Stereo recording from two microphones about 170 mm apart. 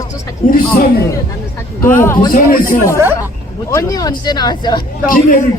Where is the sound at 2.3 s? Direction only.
55° left (ahead or behind).